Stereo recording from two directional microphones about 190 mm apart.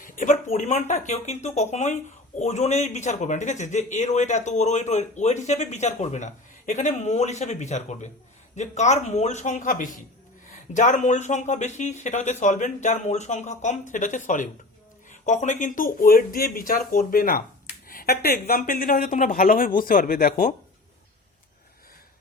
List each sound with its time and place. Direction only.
0.0 s a woman's voice: 40° left (ahead or behind)